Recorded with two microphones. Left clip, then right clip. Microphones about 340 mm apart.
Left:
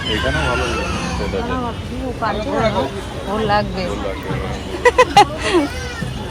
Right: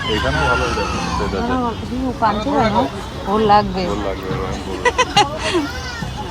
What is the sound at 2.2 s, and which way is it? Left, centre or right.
Speech, centre.